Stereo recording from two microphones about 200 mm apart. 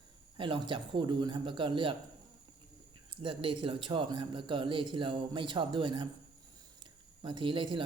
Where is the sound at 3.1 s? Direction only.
25° right (ahead or behind).